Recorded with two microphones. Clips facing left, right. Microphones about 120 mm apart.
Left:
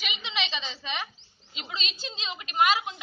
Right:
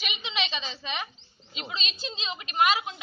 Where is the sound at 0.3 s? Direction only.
Centre (ahead or behind).